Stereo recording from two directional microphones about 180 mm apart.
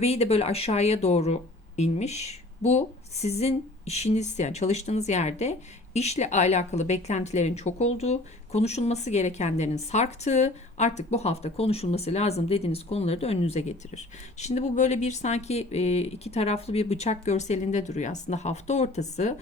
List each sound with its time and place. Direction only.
0.0 s speech: 35° left (ahead or behind)